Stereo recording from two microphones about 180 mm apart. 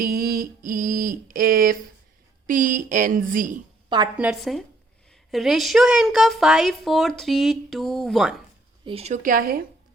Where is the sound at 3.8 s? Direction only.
25° right (ahead or behind).